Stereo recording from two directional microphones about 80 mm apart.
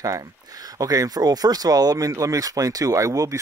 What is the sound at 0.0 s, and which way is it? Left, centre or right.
Speech, right.